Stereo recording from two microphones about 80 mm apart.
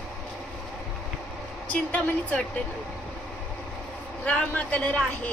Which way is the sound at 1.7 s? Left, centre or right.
Centre.